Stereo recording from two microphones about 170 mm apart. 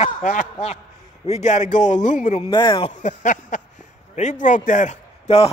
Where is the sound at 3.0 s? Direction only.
45° left (ahead or behind).